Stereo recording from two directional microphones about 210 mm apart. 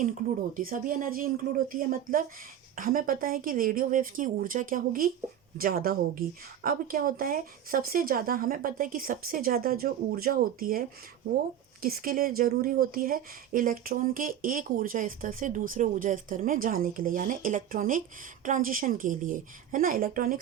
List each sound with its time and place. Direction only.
0.5 s speech: 40° right (ahead or behind)